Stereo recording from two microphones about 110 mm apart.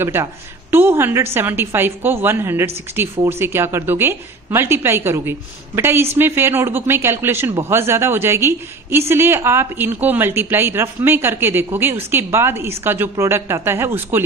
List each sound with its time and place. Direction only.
0.0 s speech: 20° right (ahead or behind)